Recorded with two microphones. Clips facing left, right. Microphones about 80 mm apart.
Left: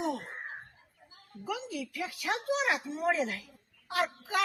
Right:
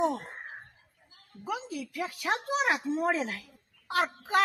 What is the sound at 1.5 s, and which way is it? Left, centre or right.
A child's voice, right.